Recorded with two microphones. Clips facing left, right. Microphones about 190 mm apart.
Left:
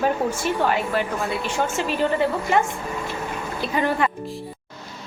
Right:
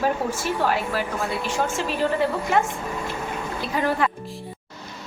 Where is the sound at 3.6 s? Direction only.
Centre (ahead or behind).